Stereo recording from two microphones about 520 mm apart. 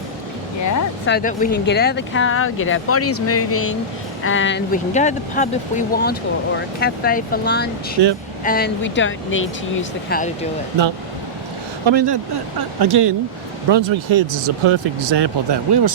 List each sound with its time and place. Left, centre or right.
1.0 s speech: centre
8.0 s speech: right
8.4 s speech: centre
11.9 s speech: right